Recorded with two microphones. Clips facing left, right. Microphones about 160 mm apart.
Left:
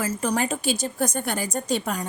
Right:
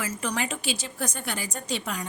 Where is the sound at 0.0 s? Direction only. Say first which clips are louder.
Left 5 dB; 40° left (ahead or behind).